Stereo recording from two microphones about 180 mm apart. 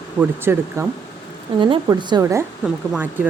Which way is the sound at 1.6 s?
30° right (ahead or behind).